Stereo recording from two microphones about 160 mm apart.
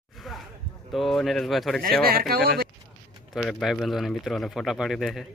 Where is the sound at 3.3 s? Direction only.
5° left (ahead or behind).